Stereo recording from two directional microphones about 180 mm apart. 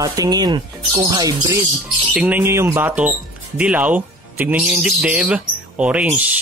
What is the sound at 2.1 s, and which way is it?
Speech, 10° right (ahead or behind).